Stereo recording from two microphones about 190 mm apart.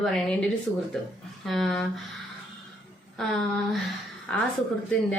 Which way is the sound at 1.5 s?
Centre (ahead or behind).